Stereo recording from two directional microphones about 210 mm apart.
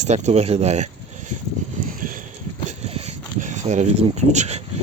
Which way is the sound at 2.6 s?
30° right (ahead or behind).